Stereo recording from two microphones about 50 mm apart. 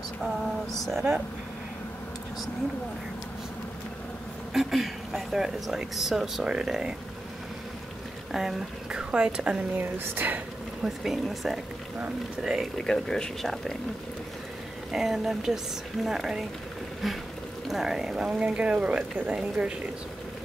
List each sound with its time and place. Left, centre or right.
0.2 s speech: centre
4.6 s speech: centre
8.3 s speech: centre
8.9 s speech: centre
9.8 s speech: right
10.8 s speech: centre
12.7 s speech: centre
14.9 s speech: centre
18.4 s speech: right